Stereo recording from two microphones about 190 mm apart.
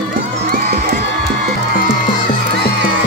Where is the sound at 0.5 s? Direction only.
50° right (ahead or behind).